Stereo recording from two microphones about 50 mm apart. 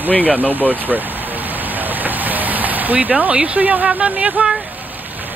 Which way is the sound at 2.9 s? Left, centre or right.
Centre.